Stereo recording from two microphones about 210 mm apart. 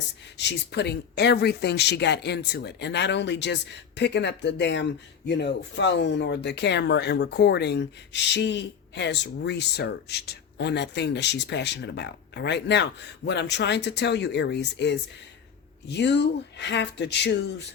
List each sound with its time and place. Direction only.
0.3 s speech: 55° left (ahead or behind)